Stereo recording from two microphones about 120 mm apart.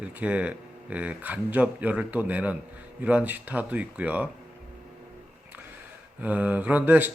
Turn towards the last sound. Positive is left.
turn(degrees=-15)  # may be behind; listen again after turning